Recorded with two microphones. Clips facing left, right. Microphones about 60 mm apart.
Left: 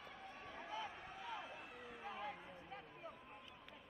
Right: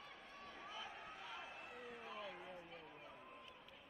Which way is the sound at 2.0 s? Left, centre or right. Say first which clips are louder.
Left 5 dB; left.